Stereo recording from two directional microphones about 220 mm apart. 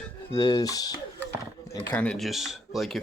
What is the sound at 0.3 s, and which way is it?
Speech, 15° left (ahead or behind).